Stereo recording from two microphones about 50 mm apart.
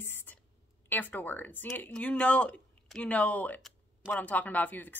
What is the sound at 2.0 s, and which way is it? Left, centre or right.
Speech, left.